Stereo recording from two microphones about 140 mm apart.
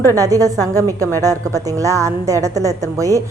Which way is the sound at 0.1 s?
25° right (ahead or behind).